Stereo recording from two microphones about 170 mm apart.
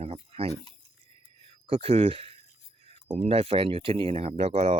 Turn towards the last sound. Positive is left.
turn(degrees=-40)  # may be behind; listen again after turning